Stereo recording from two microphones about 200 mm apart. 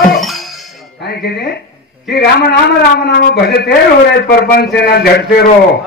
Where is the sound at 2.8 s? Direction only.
55° left (ahead or behind).